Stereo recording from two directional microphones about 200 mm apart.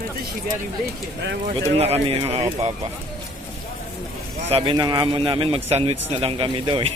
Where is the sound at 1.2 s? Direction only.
60° right (ahead or behind).